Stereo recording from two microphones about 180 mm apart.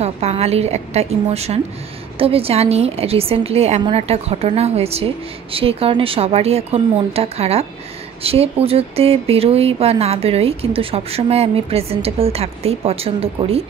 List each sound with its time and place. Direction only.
0.0 s a woman's voice: 35° right (ahead or behind)